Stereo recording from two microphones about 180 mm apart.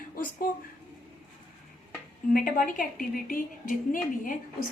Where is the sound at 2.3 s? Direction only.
50° left (ahead or behind).